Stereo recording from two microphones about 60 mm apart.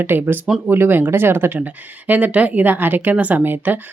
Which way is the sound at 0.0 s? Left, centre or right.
Right.